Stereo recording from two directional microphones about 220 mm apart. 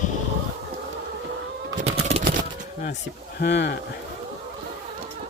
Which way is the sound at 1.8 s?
30° right (ahead or behind).